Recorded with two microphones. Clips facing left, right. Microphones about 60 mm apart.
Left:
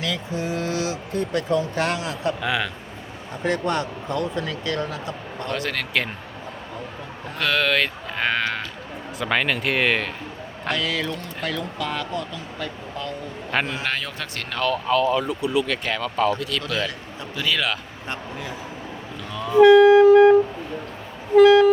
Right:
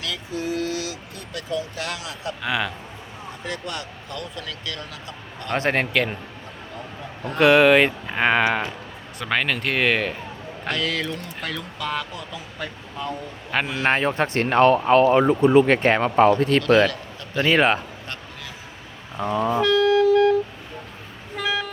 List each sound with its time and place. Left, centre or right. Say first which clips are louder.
0.0 s speech: left 2 dB; left
2.4 s speech: left 1 dB; centre
3.4 s speech: left 9 dB; left
5.5 s speech: right 5 dB; right
5.9 s speech: right 2 dB; centre
7.3 s speech: right 7 dB; centre
9.1 s speech: left 1 dB; centre
13.8 s speech: right 8 dB; right
19.6 s vehicle: left 8 dB; centre
21.3 s vehicle: left 15 dB; centre